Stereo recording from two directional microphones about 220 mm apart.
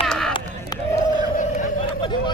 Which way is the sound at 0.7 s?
20° left (ahead or behind).